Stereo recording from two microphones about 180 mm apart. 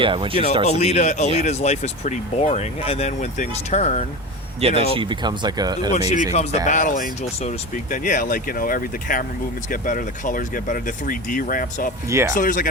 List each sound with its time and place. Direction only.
0.0 s speech: 30° right (ahead or behind)
0.6 s speech: 35° left (ahead or behind)
4.8 s speech: 30° right (ahead or behind)
5.9 s speech: 40° left (ahead or behind)
12.0 s speech: 15° right (ahead or behind)
12.3 s speech: 45° left (ahead or behind)